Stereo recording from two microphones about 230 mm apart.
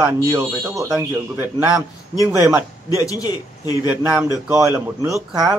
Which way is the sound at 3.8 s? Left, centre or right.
Centre.